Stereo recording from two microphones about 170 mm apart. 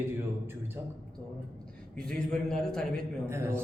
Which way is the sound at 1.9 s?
5° left (ahead or behind).